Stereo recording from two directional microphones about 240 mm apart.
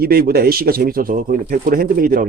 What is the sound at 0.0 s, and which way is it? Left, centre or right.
Speech, right.